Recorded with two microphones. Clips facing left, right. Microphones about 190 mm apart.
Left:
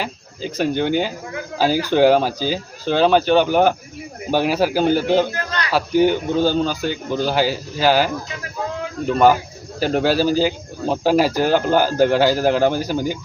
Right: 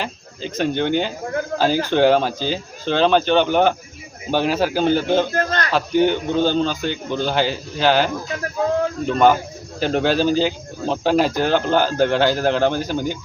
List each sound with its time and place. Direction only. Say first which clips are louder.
0.0 s speech: left 1 dB; 10° left (ahead or behind)
5.3 s a sound: right 4 dB; 50° right (ahead or behind)
5.7 s speech: left 2 dB; 10° left (ahead or behind)